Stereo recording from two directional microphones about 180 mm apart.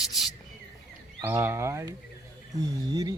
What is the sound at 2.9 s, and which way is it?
Carnatic music, 20° right (ahead or behind).